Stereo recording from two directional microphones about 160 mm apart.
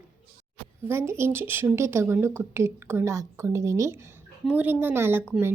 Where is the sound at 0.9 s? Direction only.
15° right (ahead or behind).